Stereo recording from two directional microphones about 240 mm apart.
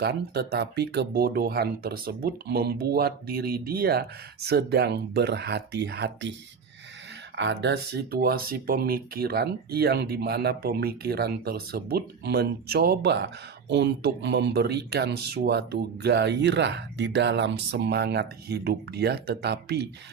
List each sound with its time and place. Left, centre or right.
0.0 s speech: right
7.3 s speech: right